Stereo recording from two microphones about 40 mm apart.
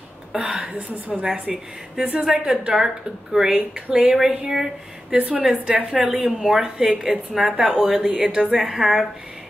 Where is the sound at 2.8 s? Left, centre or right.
Centre.